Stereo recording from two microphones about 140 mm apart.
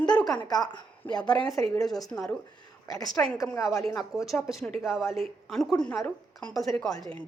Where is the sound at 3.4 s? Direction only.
20° left (ahead or behind).